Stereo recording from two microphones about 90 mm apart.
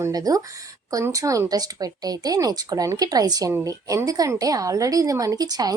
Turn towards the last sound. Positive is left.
turn(degrees=-45)  # may be behind; listen again after turning